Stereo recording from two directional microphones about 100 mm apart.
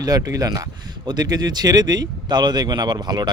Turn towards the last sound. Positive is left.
turn(degrees=-45)  # may be behind; listen again after turning